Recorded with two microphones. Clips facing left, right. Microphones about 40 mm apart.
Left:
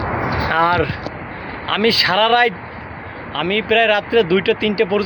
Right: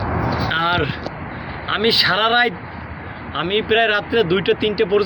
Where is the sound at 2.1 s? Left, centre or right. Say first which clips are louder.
Left 2 dB; left.